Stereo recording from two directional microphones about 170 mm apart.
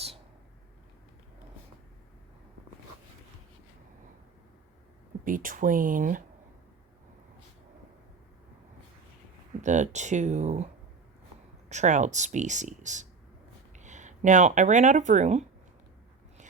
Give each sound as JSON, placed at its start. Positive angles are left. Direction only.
{"t": 5.2, "sound": "speech", "side_deg": -55}
{"t": 9.6, "sound": "speech", "side_deg": -45}
{"t": 11.7, "sound": "speech", "side_deg": -45}